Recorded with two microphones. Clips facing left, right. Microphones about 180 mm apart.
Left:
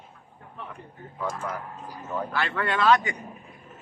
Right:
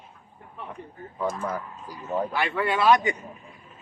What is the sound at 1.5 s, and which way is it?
Speech, 40° right (ahead or behind).